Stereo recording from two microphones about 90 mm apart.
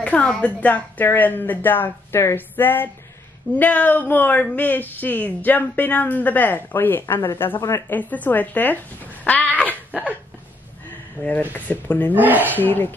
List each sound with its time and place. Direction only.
0.0 s speech: 15° left (ahead or behind)
9.2 s dog: 15° left (ahead or behind)
11.2 s speech: 20° left (ahead or behind)
12.1 s speech: 20° right (ahead or behind)
12.4 s speech: 20° left (ahead or behind)